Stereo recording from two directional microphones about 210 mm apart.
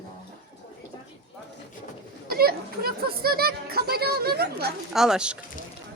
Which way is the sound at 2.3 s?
45° right (ahead or behind).